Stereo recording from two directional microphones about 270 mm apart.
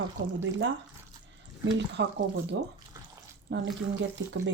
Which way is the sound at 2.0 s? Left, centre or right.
Right.